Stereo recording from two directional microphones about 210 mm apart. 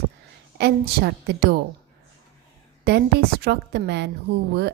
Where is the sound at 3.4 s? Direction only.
50° right (ahead or behind).